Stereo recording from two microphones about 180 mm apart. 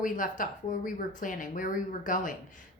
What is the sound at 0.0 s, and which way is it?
A woman's voice, 50° left (ahead or behind).